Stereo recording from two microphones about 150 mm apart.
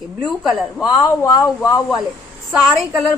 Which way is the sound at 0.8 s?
25° left (ahead or behind).